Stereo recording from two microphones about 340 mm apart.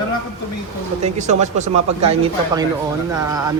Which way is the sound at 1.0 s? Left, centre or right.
Centre.